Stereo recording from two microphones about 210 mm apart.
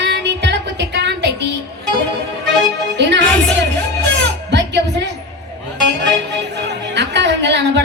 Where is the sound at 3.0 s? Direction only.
55° right (ahead or behind).